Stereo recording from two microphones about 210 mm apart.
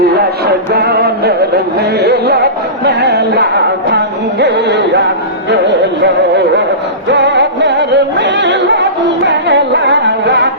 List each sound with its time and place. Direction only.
0.2 s music: 50° right (ahead or behind)